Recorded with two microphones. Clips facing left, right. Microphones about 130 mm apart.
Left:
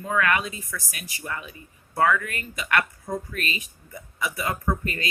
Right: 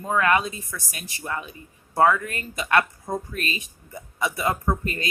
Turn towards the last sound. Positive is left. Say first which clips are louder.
# right 1 dB
turn(degrees=-30)  # may be behind; listen again after turning